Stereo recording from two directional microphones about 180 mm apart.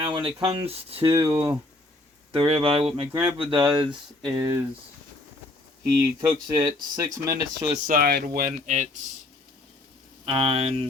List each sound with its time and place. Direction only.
0.1 s speech: 30° right (ahead or behind)
5.9 s speech: 20° right (ahead or behind)
7.7 s speech: 50° right (ahead or behind)
10.2 s speech: 30° right (ahead or behind)